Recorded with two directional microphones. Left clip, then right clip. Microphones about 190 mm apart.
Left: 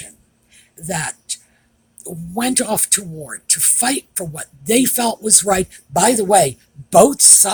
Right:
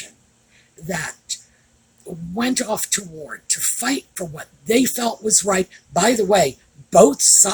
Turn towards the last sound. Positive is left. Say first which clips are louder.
# left 1 dB
turn(degrees=50)  # may be behind; listen again after turning